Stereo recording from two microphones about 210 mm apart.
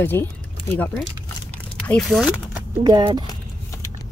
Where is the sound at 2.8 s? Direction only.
20° right (ahead or behind).